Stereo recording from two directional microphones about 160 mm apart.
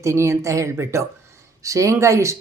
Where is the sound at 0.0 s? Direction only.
20° right (ahead or behind).